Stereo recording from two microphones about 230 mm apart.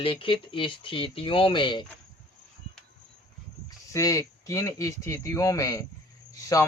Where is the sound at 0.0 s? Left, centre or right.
Left.